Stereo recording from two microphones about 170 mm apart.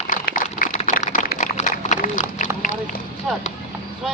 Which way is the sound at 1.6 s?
45° left (ahead or behind).